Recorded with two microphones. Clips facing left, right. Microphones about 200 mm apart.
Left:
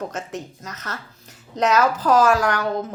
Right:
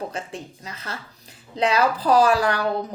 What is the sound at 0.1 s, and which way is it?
Speech, 30° right (ahead or behind).